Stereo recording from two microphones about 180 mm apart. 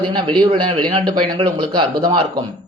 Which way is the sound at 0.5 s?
30° right (ahead or behind).